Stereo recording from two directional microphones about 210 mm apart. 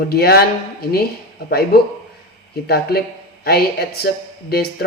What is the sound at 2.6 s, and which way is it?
Speech, 50° left (ahead or behind).